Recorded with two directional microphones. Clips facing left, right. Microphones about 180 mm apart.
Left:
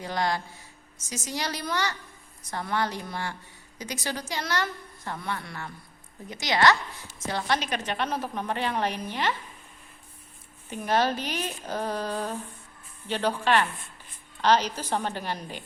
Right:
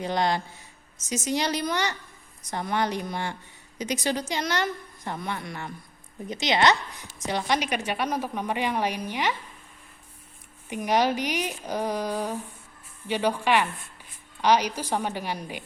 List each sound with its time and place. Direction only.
0.0 s a woman's voice: 20° right (ahead or behind)
10.7 s a woman's voice: 15° right (ahead or behind)